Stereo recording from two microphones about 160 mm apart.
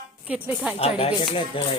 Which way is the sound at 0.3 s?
10° right (ahead or behind).